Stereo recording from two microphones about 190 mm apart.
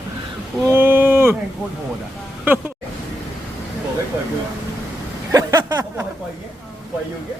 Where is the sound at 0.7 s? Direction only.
10° right (ahead or behind).